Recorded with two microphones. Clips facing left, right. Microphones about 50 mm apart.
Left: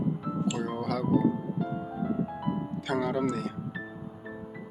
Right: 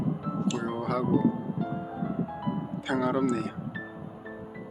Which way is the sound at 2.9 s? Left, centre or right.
Centre.